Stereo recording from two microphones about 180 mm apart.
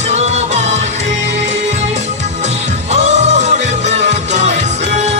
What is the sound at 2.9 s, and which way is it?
Music, 40° right (ahead or behind).